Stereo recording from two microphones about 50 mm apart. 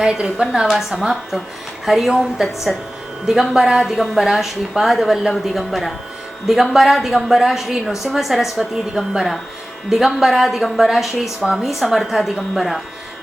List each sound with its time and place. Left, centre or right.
0.0 s a woman's voice: centre
0.8 s a woman's voice: centre
2.7 s a woman's voice: centre
3.2 s a woman's voice: centre